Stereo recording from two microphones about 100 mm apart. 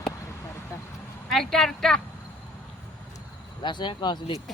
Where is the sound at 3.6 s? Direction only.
50° left (ahead or behind).